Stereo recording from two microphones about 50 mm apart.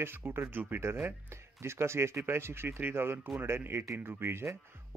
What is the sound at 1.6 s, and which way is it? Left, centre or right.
Speech, right.